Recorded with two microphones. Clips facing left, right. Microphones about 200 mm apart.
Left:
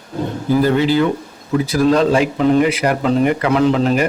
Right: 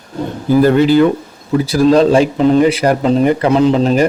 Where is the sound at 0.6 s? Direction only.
50° right (ahead or behind).